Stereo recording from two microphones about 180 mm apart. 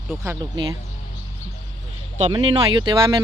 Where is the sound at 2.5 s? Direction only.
30° right (ahead or behind).